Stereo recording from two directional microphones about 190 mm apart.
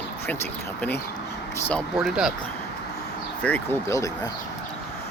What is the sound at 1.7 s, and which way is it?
Speech, centre (ahead or behind).